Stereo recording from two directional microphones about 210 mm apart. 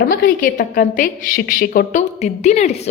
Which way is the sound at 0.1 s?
40° left (ahead or behind).